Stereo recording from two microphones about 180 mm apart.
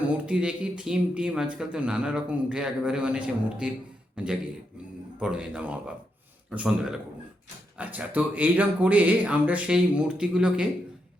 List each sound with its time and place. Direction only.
0.3 s speech: 5° right (ahead or behind)